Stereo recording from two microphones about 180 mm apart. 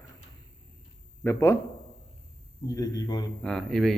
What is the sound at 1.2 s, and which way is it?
Speech, 15° left (ahead or behind).